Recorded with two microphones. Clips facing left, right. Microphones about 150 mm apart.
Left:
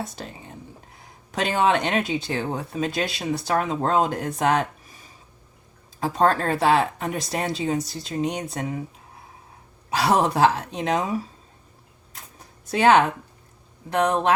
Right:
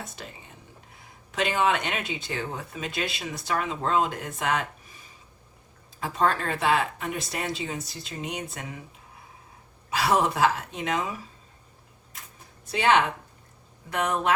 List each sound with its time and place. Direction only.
0.0 s speech: 35° left (ahead or behind)
6.0 s speech: 35° left (ahead or behind)
9.9 s speech: 35° left (ahead or behind)
12.7 s speech: 45° left (ahead or behind)
13.9 s speech: 35° left (ahead or behind)